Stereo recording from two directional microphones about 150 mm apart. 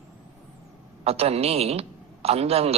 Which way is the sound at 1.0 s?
40° right (ahead or behind).